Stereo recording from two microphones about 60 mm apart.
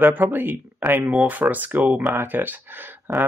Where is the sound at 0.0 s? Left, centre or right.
Right.